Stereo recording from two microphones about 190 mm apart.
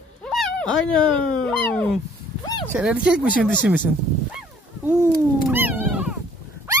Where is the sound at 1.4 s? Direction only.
5° left (ahead or behind).